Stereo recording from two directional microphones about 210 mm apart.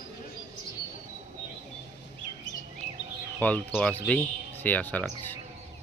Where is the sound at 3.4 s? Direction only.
5° left (ahead or behind).